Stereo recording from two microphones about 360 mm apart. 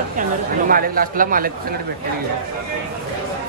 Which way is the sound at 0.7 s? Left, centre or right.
Right.